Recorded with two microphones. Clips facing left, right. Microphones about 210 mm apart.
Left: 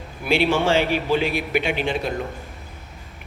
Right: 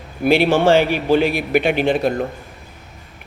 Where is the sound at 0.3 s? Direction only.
55° right (ahead or behind).